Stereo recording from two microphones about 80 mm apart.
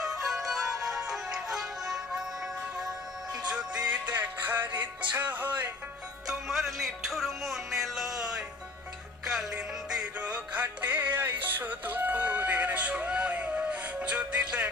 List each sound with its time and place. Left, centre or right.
0.0 s music: centre; by 5.5 s right
6.2 s music: centre